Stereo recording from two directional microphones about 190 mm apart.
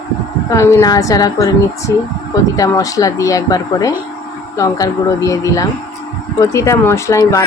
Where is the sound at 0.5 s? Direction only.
15° left (ahead or behind).